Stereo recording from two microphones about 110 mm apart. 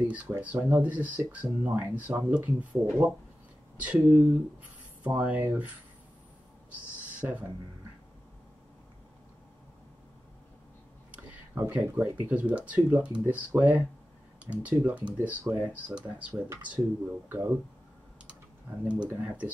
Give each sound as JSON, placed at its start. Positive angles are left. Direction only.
{"t": 0.1, "sound": "speech", "side_deg": -15}
{"t": 7.2, "sound": "speech", "side_deg": -15}
{"t": 11.5, "sound": "speech", "side_deg": -20}
{"t": 18.9, "sound": "speech", "side_deg": -10}